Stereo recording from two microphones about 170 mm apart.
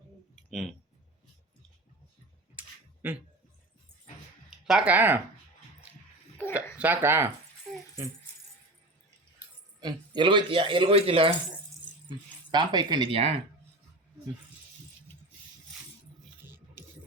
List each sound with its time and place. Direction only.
0.5 s speech: centre (ahead or behind)
2.6 s a sound: 10° right (ahead or behind)
4.4 s speech: 5° right (ahead or behind)
6.7 s speech: 10° right (ahead or behind)
9.8 s speech: 30° right (ahead or behind)
16.4 s music: 10° right (ahead or behind)